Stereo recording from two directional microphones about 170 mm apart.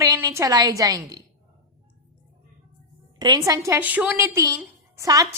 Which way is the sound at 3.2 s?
25° right (ahead or behind).